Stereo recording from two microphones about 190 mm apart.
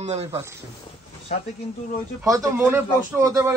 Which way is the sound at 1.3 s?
45° left (ahead or behind).